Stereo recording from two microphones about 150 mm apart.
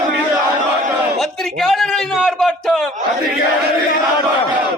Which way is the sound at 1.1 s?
Centre (ahead or behind).